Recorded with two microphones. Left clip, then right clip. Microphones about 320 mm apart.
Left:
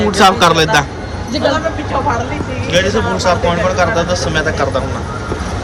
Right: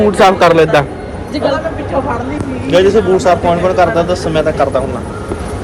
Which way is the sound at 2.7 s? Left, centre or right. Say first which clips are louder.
Right 5 dB; centre.